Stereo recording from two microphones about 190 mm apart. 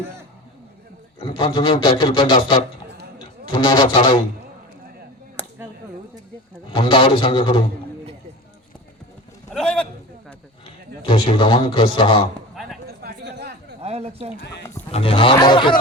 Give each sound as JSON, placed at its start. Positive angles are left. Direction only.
{"t": 1.2, "sound": "a man's voice", "side_deg": 25}
{"t": 3.6, "sound": "a man's voice", "side_deg": 25}
{"t": 6.7, "sound": "a man's voice", "side_deg": 25}
{"t": 9.5, "sound": "a sound", "side_deg": 5}
{"t": 11.0, "sound": "a man's voice", "side_deg": 25}
{"t": 13.0, "sound": "a sound", "side_deg": -60}
{"t": 13.8, "sound": "speech", "side_deg": -35}
{"t": 14.9, "sound": "a man's voice", "side_deg": 30}